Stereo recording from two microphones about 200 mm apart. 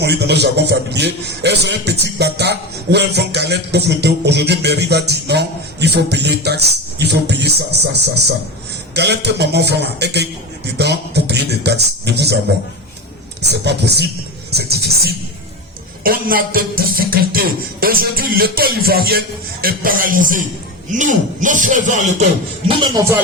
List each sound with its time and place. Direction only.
0.0 s a man's voice: 55° right (ahead or behind)
13.4 s a man's voice: 55° right (ahead or behind)
14.5 s music: 55° right (ahead or behind)
20.9 s speech: 40° right (ahead or behind)